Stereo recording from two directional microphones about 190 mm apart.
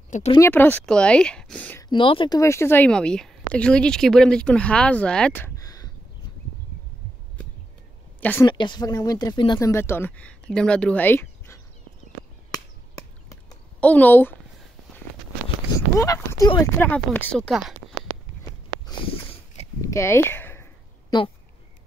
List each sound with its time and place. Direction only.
0.3 s speech: 10° left (ahead or behind)
1.9 s speech: 25° left (ahead or behind); by 5.5 s 5° left (ahead or behind)
5.6 s a sound: 20° left (ahead or behind)
8.2 s a woman's voice: 10° left (ahead or behind)
8.5 s speech: 25° left (ahead or behind)
13.7 s speech: 10° left (ahead or behind)
15.7 s speech: 15° left (ahead or behind)
16.8 s speech: 10° left (ahead or behind)
19.8 s speech: 15° left (ahead or behind)